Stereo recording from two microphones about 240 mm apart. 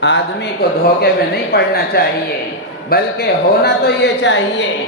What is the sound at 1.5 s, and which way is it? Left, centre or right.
A woman's voice, left.